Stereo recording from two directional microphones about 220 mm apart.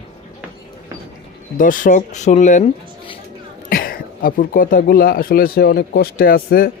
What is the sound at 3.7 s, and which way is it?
Speech, 40° left (ahead or behind).